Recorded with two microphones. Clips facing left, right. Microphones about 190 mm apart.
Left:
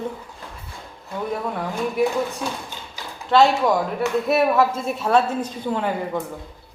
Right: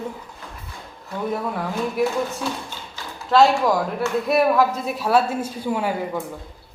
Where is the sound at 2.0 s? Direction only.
Centre (ahead or behind).